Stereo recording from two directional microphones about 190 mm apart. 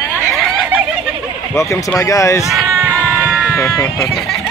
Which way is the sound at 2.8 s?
10° right (ahead or behind).